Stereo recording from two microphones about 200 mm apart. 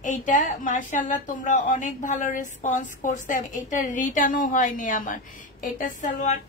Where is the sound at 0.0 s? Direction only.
40° left (ahead or behind).